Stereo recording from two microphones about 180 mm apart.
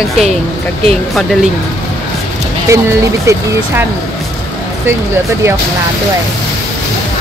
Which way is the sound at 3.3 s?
15° right (ahead or behind).